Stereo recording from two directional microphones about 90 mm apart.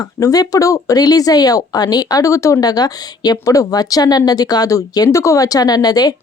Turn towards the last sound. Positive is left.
turn(degrees=45)  # may be behind; listen again after turning